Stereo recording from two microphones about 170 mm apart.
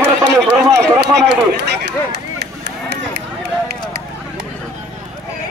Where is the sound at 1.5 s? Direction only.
75° right (ahead or behind).